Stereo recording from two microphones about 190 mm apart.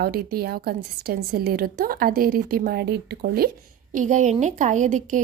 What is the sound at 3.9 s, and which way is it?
A woman's voice, 40° right (ahead or behind).